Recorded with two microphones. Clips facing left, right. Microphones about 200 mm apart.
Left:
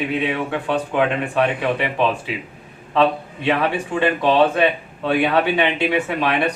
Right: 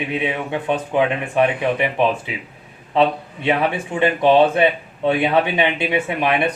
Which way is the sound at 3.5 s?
15° right (ahead or behind).